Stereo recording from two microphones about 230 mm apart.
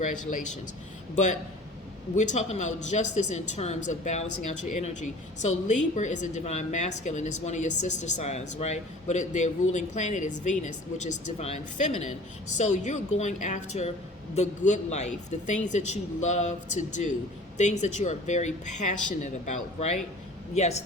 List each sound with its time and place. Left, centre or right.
0.0 s a woman's voice: left
5.4 s a woman's voice: left